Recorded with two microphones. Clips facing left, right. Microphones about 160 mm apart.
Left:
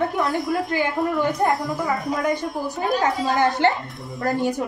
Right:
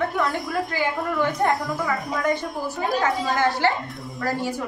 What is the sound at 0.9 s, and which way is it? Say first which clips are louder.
Speech: left 2 dB; centre (ahead or behind).